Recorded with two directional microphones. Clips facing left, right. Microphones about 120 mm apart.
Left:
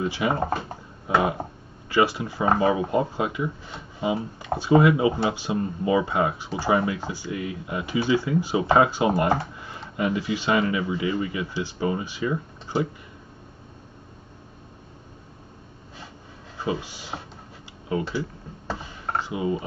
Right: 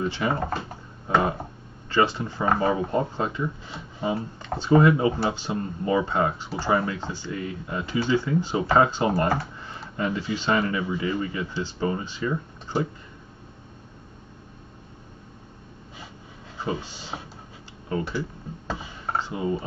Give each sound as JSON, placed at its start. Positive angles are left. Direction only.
{"t": 0.0, "sound": "speech", "side_deg": 15}
{"t": 1.0, "sound": "a sound", "side_deg": 10}
{"t": 1.9, "sound": "speech", "side_deg": 10}
{"t": 16.5, "sound": "speech", "side_deg": 10}